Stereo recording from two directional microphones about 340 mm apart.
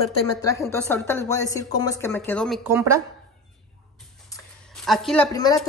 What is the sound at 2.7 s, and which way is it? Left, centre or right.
Speech, centre.